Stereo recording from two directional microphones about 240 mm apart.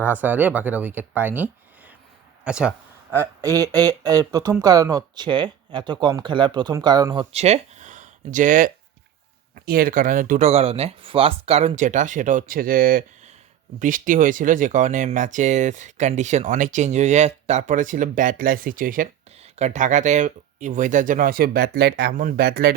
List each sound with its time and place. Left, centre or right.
0.0 s speech: centre; by 22.7 s right